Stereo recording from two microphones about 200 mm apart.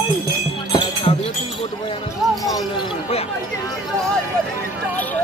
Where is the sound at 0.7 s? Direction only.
25° left (ahead or behind).